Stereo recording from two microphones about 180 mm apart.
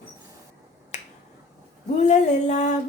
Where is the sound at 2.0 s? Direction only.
40° left (ahead or behind).